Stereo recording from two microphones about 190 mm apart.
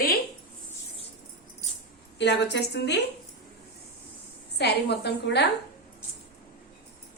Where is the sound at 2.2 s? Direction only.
65° left (ahead or behind).